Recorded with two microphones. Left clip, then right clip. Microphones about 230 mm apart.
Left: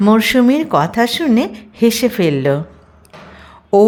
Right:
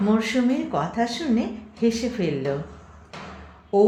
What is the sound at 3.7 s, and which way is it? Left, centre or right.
Speech, left.